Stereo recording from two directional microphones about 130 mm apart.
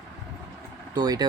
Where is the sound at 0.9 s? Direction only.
30° right (ahead or behind).